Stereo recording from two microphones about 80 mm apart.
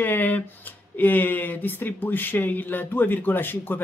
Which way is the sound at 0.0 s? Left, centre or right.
Left.